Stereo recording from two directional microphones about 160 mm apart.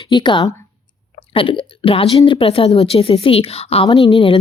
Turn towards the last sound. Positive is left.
turn(degrees=35)  # may be behind; listen again after turning